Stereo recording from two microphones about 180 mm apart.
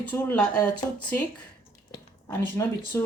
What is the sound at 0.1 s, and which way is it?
Speech, 10° left (ahead or behind).